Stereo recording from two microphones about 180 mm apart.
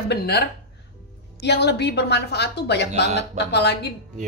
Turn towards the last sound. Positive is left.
turn(degrees=70)  # may be behind; listen again after turning